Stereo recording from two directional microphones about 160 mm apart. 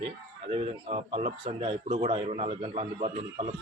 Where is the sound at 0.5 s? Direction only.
40° right (ahead or behind).